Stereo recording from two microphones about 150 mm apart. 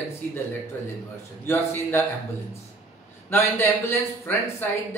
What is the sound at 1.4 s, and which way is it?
Speech, 15° left (ahead or behind).